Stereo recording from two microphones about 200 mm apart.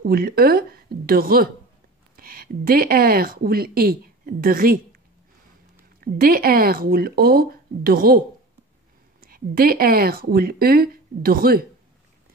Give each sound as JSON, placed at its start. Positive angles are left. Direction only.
{"t": 0.0, "sound": "speech", "side_deg": -50}
{"t": 6.1, "sound": "speech", "side_deg": -45}
{"t": 9.2, "sound": "speech", "side_deg": -45}